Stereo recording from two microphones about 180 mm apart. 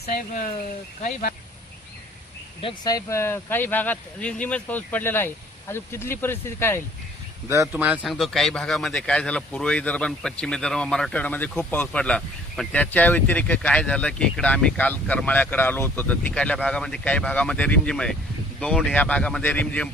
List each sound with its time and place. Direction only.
0.0 s speech: 45° left (ahead or behind)
2.6 s speech: 25° left (ahead or behind)
7.4 s speech: 15° right (ahead or behind); by 19.9 s 10° left (ahead or behind)